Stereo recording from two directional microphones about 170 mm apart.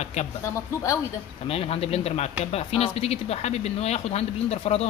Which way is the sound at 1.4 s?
35° left (ahead or behind).